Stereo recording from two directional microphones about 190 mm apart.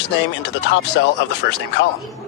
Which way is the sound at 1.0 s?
75° left (ahead or behind).